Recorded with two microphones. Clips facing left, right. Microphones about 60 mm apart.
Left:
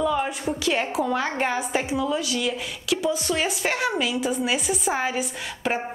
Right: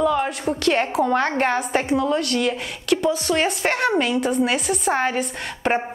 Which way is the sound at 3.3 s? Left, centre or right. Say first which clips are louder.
Right 5 dB; right.